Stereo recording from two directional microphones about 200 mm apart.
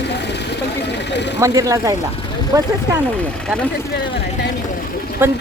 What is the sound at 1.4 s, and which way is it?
Speech, 15° right (ahead or behind).